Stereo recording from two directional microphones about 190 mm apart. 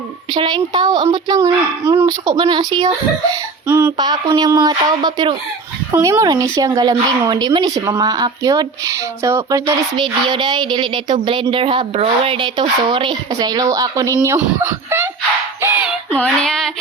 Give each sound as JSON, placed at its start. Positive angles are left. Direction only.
{"t": 0.3, "sound": "speech", "side_deg": -25}
{"t": 2.0, "sound": "speech", "side_deg": -25}
{"t": 15.6, "sound": "a sound", "side_deg": -5}
{"t": 16.1, "sound": "female singing", "side_deg": 5}